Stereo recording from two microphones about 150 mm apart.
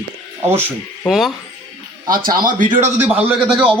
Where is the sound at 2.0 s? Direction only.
70° right (ahead or behind).